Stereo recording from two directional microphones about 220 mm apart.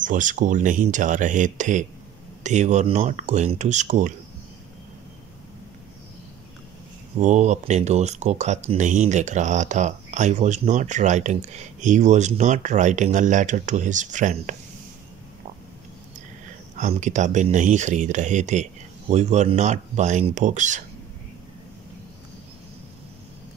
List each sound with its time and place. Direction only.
0.0 s speech: 35° right (ahead or behind)
7.2 s speech: 35° right (ahead or behind)
16.7 s speech: 35° right (ahead or behind)